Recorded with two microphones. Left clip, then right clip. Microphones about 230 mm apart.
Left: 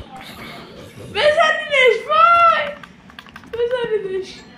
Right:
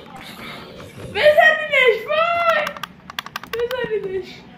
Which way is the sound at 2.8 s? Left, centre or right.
Right.